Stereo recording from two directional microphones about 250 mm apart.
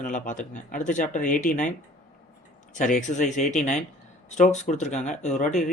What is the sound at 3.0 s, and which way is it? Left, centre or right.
A man's voice, left.